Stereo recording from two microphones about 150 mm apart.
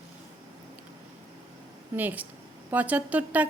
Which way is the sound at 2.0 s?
10° right (ahead or behind).